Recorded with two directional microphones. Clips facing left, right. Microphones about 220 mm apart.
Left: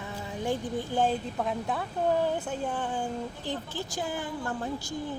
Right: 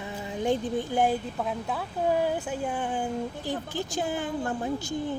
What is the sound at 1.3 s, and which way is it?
Speech, centre (ahead or behind).